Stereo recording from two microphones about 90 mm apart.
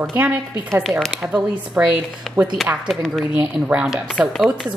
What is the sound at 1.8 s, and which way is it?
Speech, 15° right (ahead or behind).